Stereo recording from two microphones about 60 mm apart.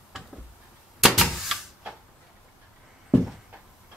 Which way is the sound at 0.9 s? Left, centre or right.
Centre.